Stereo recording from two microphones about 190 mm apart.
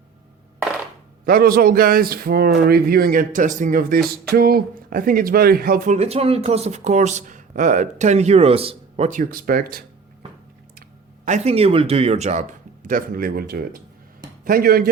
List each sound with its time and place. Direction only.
1.2 s speech: 50° right (ahead or behind)
11.3 s speech: 35° right (ahead or behind); by 14.8 s 50° right (ahead or behind)